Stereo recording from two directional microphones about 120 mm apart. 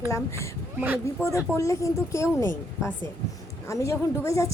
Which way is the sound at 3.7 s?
25° left (ahead or behind).